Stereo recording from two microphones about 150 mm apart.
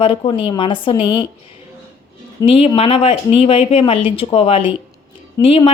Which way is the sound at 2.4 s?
35° left (ahead or behind).